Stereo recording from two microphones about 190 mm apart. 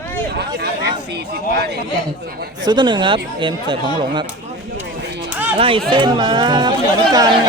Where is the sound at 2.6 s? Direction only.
25° right (ahead or behind).